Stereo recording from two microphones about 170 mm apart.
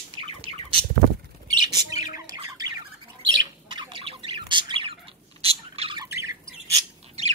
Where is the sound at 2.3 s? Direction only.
25° right (ahead or behind).